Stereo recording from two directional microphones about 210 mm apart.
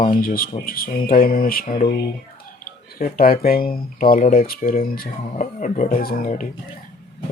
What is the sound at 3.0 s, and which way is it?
Speech, 45° left (ahead or behind).